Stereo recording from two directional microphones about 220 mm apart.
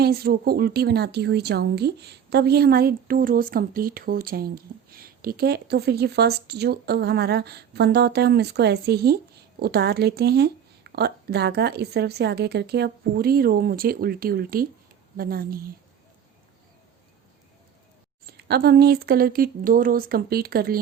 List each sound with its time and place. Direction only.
0.0 s a woman's voice: 45° right (ahead or behind)
18.3 s a woman's voice: 45° right (ahead or behind)